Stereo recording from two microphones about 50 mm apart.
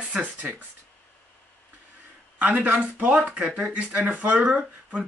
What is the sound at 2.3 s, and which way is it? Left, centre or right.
Speech, right.